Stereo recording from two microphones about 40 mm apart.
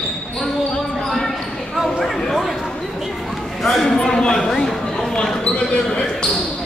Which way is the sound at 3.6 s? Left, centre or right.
Centre.